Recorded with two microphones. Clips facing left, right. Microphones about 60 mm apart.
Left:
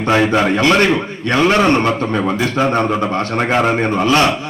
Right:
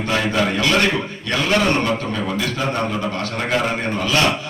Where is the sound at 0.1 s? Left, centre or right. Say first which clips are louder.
Left 7 dB; left.